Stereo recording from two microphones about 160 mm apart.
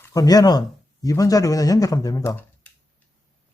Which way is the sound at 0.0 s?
20° left (ahead or behind).